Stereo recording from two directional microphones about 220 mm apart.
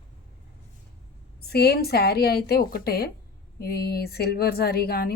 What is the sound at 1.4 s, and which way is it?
A woman's voice, 45° left (ahead or behind).